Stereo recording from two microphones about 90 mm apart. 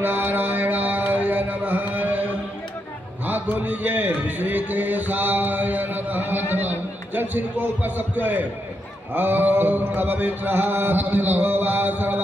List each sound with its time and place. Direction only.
0.0 s mantra: 25° right (ahead or behind)
3.3 s a man's voice: 20° right (ahead or behind)